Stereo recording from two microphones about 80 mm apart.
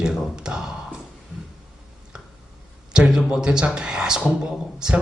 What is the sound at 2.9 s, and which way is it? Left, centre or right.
A man's voice, centre.